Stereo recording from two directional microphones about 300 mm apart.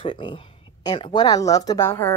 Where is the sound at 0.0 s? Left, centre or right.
Centre.